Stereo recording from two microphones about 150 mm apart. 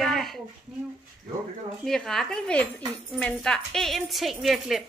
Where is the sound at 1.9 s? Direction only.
5° left (ahead or behind).